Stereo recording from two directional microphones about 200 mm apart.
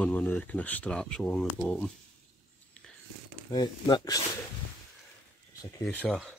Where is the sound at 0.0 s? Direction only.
10° left (ahead or behind).